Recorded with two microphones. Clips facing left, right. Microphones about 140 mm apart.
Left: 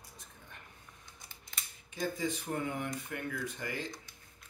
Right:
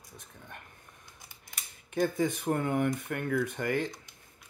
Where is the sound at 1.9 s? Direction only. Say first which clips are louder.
Right 7 dB; 55° right (ahead or behind).